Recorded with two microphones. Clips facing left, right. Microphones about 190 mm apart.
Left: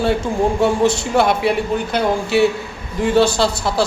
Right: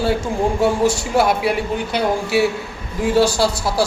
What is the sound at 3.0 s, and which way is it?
Speech, 5° right (ahead or behind).